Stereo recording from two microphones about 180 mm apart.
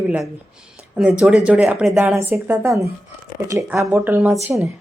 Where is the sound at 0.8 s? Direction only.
5° right (ahead or behind).